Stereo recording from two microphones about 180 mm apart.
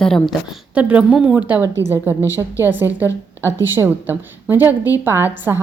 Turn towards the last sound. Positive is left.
turn(degrees=-10)  # may be behind; listen again after turning